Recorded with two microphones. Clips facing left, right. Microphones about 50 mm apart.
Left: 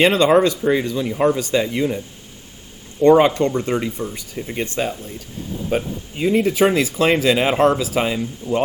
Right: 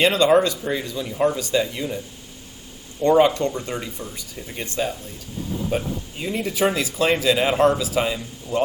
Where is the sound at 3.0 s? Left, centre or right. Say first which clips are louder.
Left 4 dB; left.